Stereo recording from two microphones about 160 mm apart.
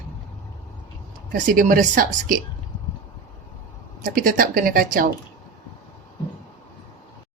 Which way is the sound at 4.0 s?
60° right (ahead or behind).